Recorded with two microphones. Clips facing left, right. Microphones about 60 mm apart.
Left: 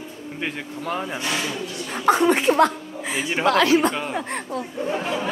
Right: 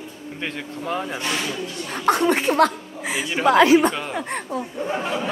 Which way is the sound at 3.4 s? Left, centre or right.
Centre.